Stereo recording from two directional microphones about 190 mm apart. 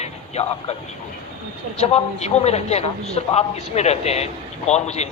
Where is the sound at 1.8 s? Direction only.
35° left (ahead or behind).